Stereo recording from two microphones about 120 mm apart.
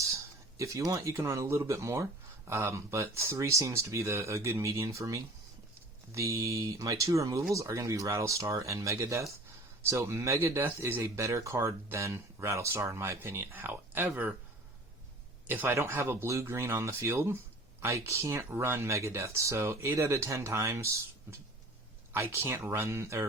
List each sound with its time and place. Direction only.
0.0 s speech: 25° right (ahead or behind)
15.4 s speech: 20° right (ahead or behind)